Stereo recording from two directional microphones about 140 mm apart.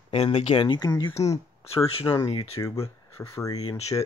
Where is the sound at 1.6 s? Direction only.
45° left (ahead or behind).